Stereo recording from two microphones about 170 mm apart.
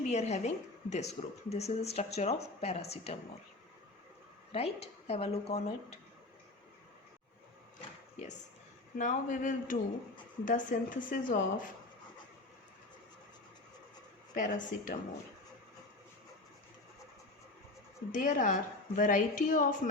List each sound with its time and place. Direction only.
0.0 s a woman's voice: 40° left (ahead or behind)
4.5 s a woman's voice: 35° left (ahead or behind)
9.0 s a woman's voice: 50° left (ahead or behind)
14.3 s a woman's voice: 50° left (ahead or behind)
18.1 s a woman's voice: 50° left (ahead or behind)